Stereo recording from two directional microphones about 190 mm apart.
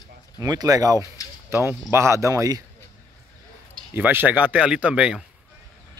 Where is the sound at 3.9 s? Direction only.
10° right (ahead or behind).